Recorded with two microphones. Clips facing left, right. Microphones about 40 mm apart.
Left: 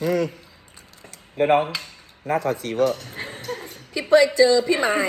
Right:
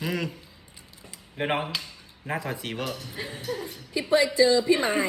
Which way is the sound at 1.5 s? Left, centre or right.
Left.